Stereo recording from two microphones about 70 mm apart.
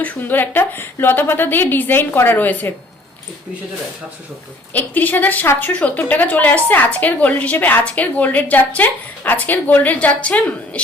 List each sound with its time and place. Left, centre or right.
0.0 s a woman's voice: left
4.7 s a woman's voice: left